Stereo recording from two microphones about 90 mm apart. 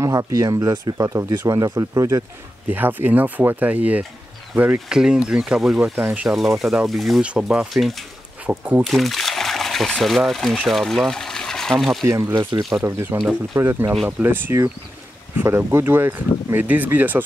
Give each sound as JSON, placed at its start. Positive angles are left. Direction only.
{"t": 0.0, "sound": "speech", "side_deg": -35}
{"t": 2.7, "sound": "speech", "side_deg": -20}
{"t": 5.9, "sound": "speech", "side_deg": -20}
{"t": 6.2, "sound": "speech", "side_deg": 0}
{"t": 8.5, "sound": "speech", "side_deg": -20}
{"t": 8.8, "sound": "speech", "side_deg": 0}
{"t": 12.0, "sound": "speech", "side_deg": -35}
{"t": 12.5, "sound": "speech", "side_deg": -50}
{"t": 12.8, "sound": "speech", "side_deg": -25}